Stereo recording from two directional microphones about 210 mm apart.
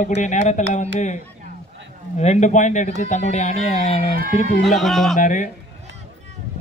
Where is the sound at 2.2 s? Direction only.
35° left (ahead or behind).